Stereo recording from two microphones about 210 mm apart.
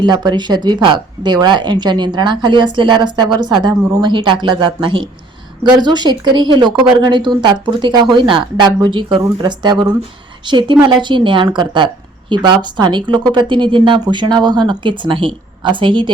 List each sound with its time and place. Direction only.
0.0 s speech: 20° right (ahead or behind)